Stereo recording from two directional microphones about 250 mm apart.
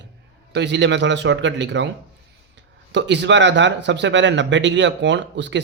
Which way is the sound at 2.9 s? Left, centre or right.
Right.